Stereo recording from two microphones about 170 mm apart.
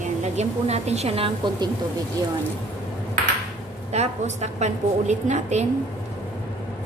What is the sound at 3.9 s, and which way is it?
A woman's voice, 40° right (ahead or behind).